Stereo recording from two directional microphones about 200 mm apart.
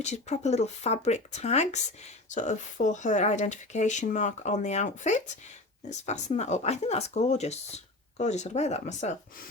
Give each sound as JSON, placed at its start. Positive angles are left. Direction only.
{"t": 0.0, "sound": "speech", "side_deg": 35}